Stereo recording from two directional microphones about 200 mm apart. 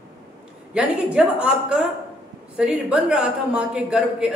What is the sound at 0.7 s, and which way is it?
A man's voice, 5° right (ahead or behind).